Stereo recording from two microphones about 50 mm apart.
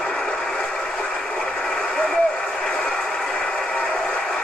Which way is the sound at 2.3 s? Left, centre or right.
Centre.